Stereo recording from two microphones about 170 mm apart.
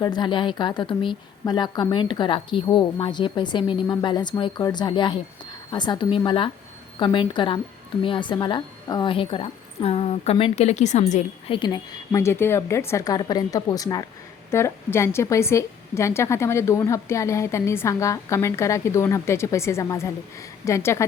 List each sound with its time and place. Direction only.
0.0 s a woman's voice: 25° left (ahead or behind)